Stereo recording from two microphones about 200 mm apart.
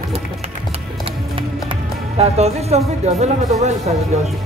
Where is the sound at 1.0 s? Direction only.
25° right (ahead or behind).